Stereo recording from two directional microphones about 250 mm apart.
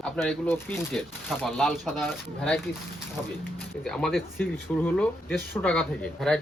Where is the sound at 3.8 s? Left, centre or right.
Centre.